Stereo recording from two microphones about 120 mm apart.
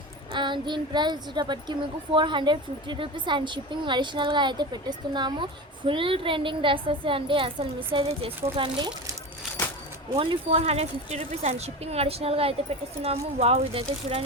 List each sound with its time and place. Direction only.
0.3 s a sound: 40° right (ahead or behind)
2.1 s a woman's voice: 40° right (ahead or behind)
10.2 s speech: 50° right (ahead or behind)